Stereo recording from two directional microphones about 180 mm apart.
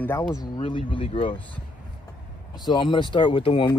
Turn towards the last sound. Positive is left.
turn(degrees=30)  # may be behind; listen again after turning